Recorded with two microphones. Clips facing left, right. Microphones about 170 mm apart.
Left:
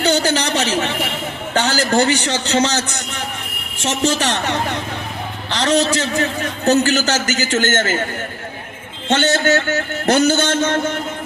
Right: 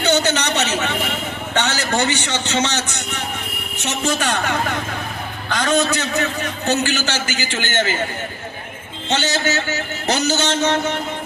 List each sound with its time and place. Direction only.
0.0 s a sound: 35° left (ahead or behind)
1.5 s a man's voice: 35° left (ahead or behind)
4.3 s a man's voice: 30° left (ahead or behind); by 7.9 s 45° left (ahead or behind)
9.0 s a man's voice: 55° left (ahead or behind)